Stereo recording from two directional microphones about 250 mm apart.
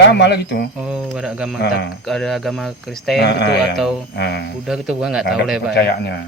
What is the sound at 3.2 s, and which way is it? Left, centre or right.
Speech, left.